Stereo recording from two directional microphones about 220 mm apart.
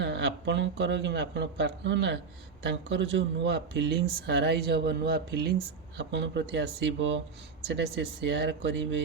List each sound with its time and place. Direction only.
0.0 s speech: 50° right (ahead or behind)